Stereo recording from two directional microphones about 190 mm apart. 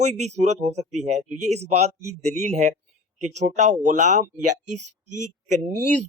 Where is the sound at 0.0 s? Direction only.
35° right (ahead or behind).